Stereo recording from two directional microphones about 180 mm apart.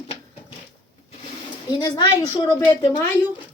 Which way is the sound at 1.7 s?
20° left (ahead or behind).